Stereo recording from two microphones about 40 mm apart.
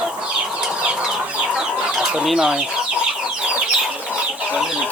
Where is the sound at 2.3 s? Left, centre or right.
Centre.